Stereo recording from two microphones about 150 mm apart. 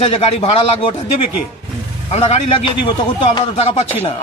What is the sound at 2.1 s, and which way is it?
A man's voice, 45° left (ahead or behind).